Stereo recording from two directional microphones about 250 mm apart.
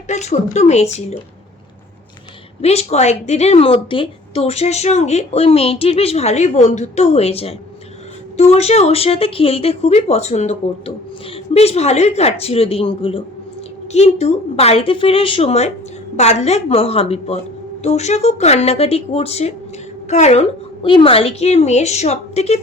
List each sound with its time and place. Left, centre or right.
0.1 s a woman's voice: left
2.6 s a woman's voice: left